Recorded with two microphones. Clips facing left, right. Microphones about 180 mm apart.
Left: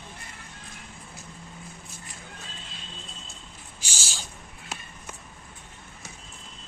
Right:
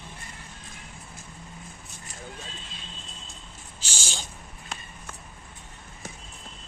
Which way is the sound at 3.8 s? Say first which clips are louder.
Right 1 dB; 10° left (ahead or behind).